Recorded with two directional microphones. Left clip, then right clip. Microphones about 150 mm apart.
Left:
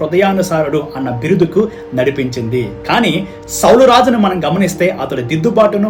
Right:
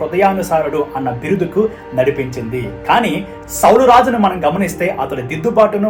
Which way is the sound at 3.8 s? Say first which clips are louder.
Left 1 dB; 30° left (ahead or behind).